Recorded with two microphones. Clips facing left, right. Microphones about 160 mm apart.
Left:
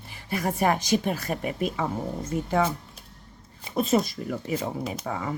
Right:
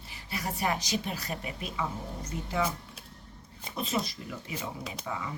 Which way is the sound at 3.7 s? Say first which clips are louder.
Left 9 dB; 45° left (ahead or behind).